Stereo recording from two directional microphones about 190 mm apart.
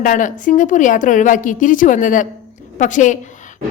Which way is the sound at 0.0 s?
45° left (ahead or behind).